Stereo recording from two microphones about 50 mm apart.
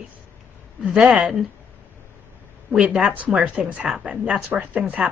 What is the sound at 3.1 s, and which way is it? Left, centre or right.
Speech, right.